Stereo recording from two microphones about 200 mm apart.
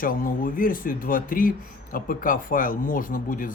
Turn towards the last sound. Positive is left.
turn(degrees=45)  # may be behind; listen again after turning